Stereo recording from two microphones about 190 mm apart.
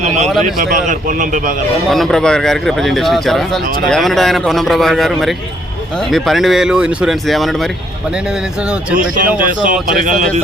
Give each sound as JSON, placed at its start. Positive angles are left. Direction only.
{"t": 0.0, "sound": "a man's voice", "side_deg": -40}
{"t": 1.9, "sound": "speech", "side_deg": 0}
{"t": 9.0, "sound": "a man's voice", "side_deg": -45}